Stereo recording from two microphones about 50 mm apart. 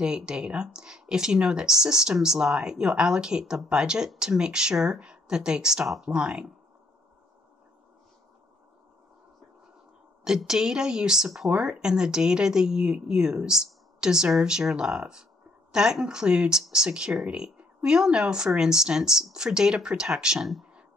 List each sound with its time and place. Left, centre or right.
0.0 s speech: centre
10.2 s speech: centre